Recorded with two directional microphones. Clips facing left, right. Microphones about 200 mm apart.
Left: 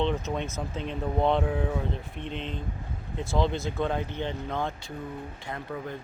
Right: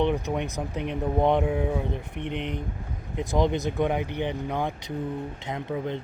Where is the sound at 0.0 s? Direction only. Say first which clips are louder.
Right 3 dB; 15° right (ahead or behind).